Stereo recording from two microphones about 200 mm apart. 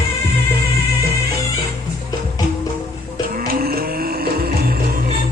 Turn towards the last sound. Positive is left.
turn(degrees=-50)  # may be behind; listen again after turning